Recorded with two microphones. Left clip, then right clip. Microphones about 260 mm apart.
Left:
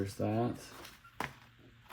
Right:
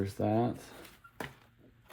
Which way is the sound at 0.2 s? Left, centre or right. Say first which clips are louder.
Right 4 dB; right.